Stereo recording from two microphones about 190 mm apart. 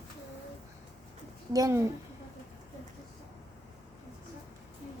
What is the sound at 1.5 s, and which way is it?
Speech, 15° right (ahead or behind).